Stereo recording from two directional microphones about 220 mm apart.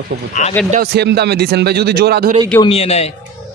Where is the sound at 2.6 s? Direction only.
25° left (ahead or behind).